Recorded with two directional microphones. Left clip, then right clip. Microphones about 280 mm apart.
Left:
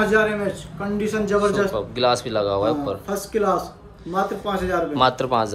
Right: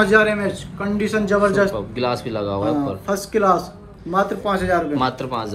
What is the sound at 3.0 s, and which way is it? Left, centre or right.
A man's voice, centre.